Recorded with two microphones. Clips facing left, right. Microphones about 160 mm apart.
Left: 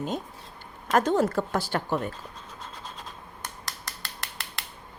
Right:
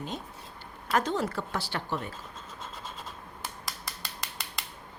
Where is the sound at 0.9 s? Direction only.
45° left (ahead or behind).